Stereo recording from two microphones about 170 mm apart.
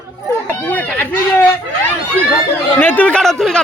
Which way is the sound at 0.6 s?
10° left (ahead or behind).